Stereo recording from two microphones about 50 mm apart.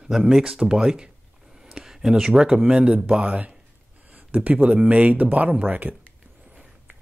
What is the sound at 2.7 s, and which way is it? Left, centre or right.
Speech, right.